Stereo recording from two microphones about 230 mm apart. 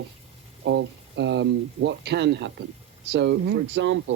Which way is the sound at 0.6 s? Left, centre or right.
Right.